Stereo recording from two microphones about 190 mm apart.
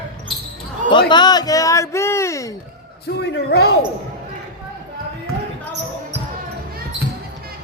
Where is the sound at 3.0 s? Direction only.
60° left (ahead or behind).